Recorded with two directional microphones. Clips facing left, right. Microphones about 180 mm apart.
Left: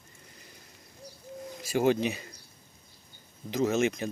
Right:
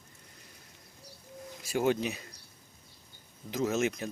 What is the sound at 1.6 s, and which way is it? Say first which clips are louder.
Speech: left 3 dB; centre (ahead or behind).